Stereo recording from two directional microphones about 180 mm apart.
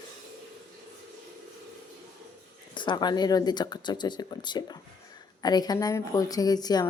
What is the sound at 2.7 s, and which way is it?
A woman's voice, 25° left (ahead or behind).